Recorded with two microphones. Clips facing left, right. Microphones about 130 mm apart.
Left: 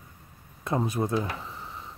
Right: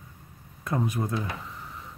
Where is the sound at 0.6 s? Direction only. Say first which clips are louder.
Left 1 dB; 25° left (ahead or behind).